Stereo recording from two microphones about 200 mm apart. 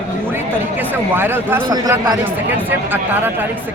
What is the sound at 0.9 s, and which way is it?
Speech, 10° right (ahead or behind).